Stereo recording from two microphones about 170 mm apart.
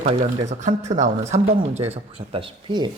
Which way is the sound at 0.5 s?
45° right (ahead or behind).